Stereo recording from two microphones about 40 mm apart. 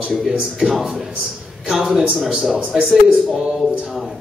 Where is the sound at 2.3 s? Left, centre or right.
Centre.